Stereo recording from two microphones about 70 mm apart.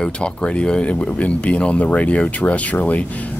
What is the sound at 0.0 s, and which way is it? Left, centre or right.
Speech, centre.